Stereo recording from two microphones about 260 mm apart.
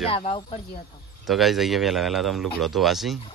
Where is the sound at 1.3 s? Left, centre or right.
Centre.